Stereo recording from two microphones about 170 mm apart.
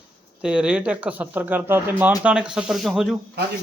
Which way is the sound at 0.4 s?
5° right (ahead or behind).